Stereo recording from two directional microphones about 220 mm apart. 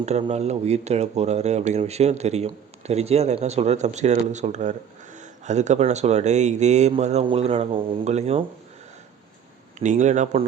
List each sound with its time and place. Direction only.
0.0 s speech: 30° right (ahead or behind)
9.7 s speech: 35° right (ahead or behind)